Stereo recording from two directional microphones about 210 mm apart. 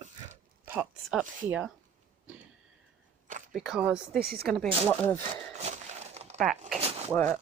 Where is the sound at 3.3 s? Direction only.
40° right (ahead or behind).